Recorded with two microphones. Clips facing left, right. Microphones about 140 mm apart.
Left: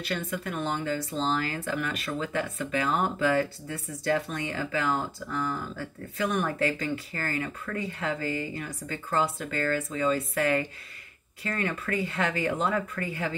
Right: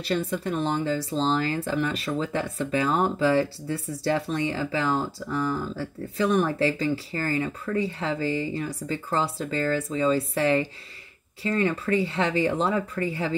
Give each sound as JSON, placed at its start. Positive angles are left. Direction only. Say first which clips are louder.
{"t": 0.0, "sound": "speech", "louder": "right 5 dB", "side_deg": -30}